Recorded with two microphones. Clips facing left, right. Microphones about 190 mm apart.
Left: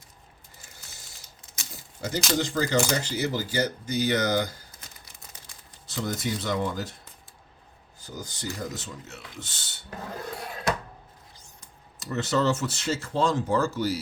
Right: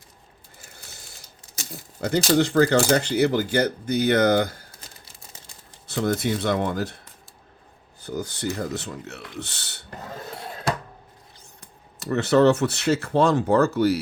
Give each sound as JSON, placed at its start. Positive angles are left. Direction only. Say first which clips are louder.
{"t": 1.7, "sound": "a sound", "louder": "right 7 dB", "side_deg": -60}
{"t": 2.3, "sound": "speech", "louder": "right 7 dB", "side_deg": -60}
{"t": 5.9, "sound": "speech", "louder": "right 7 dB", "side_deg": -60}
{"t": 8.0, "sound": "speech", "louder": "right 8 dB", "side_deg": -60}
{"t": 11.3, "sound": "speech", "louder": "right 3 dB", "side_deg": -60}